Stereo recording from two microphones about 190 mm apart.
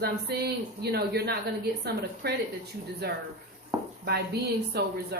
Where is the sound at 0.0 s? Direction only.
60° right (ahead or behind).